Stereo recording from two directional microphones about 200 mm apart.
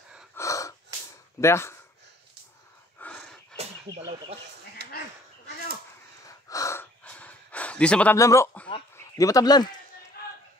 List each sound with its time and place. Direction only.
0.4 s gasp: 15° left (ahead or behind)
1.4 s speech: 15° left (ahead or behind)
3.0 s a sound: 5° left (ahead or behind)
3.9 s speech: 20° right (ahead or behind)
4.8 s a sound: 55° right (ahead or behind)
6.2 s gasp: 15° left (ahead or behind)
8.9 s speech: 15° left (ahead or behind)